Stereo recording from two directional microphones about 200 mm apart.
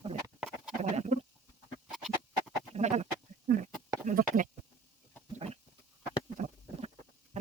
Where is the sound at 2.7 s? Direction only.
35° right (ahead or behind).